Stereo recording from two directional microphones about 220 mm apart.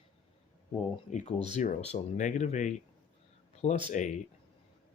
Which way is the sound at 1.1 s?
30° left (ahead or behind).